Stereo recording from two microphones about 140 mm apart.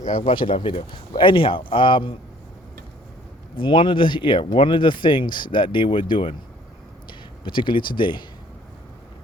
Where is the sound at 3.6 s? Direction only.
35° left (ahead or behind).